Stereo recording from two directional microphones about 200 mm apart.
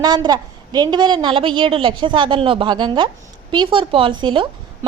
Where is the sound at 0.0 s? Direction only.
20° right (ahead or behind).